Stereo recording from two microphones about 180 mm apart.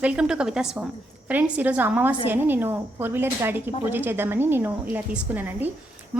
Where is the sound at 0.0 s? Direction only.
5° right (ahead or behind).